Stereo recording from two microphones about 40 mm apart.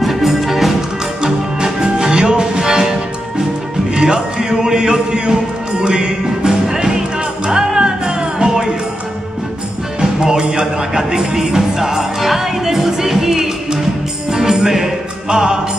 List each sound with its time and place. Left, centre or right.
0.0 s music: centre
1.2 s music: centre
9.9 s music: centre